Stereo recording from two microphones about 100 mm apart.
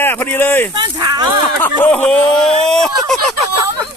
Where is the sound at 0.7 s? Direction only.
50° right (ahead or behind).